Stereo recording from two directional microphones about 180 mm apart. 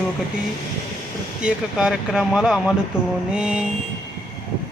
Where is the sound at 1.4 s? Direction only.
5° right (ahead or behind).